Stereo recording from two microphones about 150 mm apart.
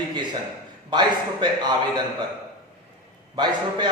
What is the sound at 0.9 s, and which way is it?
Speech, 30° right (ahead or behind).